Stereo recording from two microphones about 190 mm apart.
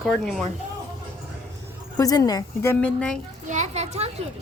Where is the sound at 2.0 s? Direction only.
20° left (ahead or behind).